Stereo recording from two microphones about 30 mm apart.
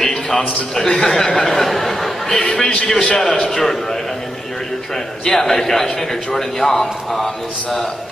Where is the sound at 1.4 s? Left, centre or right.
Centre.